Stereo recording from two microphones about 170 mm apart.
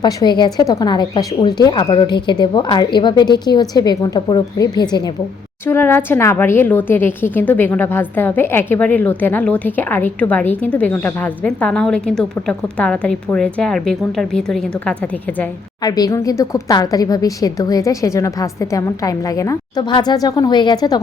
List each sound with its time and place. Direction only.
0.0 s a woman's voice: 25° left (ahead or behind)
5.6 s a woman's voice: 15° left (ahead or behind)
15.8 s a woman's voice: 20° left (ahead or behind)